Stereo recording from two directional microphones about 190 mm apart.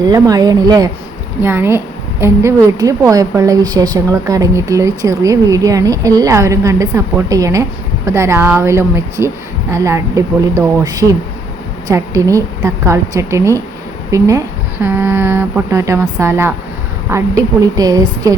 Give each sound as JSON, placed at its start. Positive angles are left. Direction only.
{"t": 0.0, "sound": "a woman's voice", "side_deg": -20}